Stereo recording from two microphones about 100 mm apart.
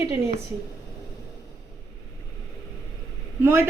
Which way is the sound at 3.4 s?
25° right (ahead or behind).